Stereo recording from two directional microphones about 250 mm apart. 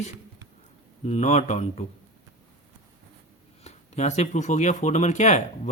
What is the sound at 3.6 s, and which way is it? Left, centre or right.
Speech, left.